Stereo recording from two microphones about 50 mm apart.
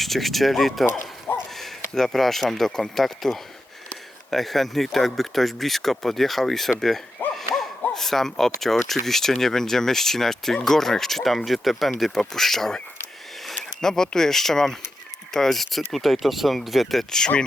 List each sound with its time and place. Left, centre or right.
0.0 s speech: centre
7.3 s hoot: centre
7.9 s speech: centre